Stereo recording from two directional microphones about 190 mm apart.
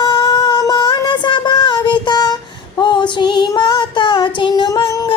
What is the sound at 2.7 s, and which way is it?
Child singing, 25° left (ahead or behind).